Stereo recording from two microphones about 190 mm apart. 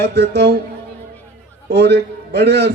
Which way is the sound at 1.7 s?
60° right (ahead or behind).